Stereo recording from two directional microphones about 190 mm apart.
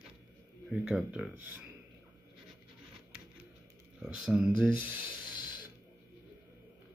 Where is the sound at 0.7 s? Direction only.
5° right (ahead or behind).